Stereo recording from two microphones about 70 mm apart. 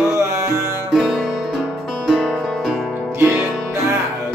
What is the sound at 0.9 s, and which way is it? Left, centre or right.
Music, centre.